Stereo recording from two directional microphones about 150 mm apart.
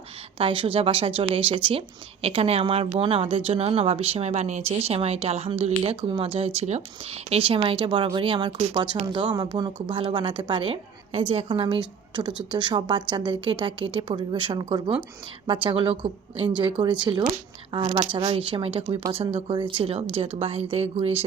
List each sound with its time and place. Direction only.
0.3 s speech: 35° right (ahead or behind)